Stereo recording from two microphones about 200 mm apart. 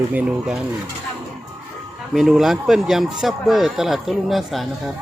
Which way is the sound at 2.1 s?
Centre (ahead or behind).